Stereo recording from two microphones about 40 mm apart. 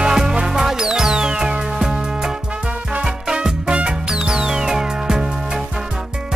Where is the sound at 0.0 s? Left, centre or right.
Centre.